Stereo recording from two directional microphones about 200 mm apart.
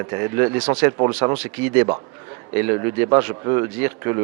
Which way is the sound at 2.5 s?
15° right (ahead or behind).